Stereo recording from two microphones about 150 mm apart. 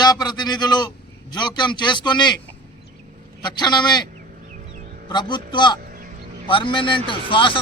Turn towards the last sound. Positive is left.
turn(degrees=35)  # may be behind; listen again after turning